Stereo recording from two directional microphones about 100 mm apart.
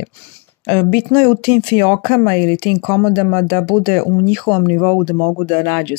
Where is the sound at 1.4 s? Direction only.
45° left (ahead or behind); by 5.1 s 30° left (ahead or behind).